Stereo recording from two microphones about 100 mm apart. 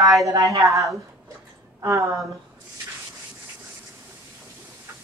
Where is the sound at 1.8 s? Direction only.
30° right (ahead or behind).